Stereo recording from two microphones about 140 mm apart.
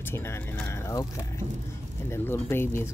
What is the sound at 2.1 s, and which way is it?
Speech, 15° left (ahead or behind).